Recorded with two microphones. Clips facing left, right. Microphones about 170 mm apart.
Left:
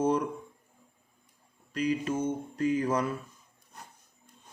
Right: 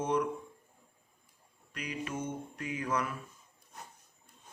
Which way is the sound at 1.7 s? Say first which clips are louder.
Left 9 dB; 30° left (ahead or behind).